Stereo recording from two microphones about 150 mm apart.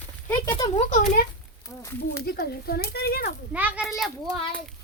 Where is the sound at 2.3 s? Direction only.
90° left.